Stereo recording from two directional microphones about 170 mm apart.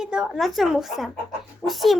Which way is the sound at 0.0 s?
5° right (ahead or behind).